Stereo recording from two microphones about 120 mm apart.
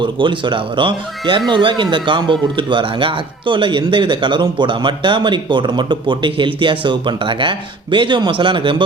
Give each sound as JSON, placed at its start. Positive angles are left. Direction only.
{"t": 0.0, "sound": "speech", "side_deg": -45}